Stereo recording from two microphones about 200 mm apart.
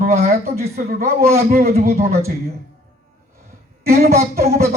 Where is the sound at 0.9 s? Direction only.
50° right (ahead or behind).